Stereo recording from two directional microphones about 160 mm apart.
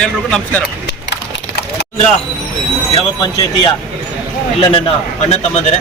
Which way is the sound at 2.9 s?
30° left (ahead or behind).